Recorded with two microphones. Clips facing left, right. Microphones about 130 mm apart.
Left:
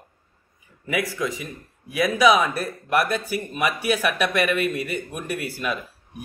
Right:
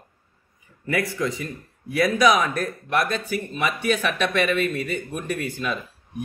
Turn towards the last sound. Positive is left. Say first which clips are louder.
# right 4 dB
turn(degrees=5)  # may be behind; listen again after turning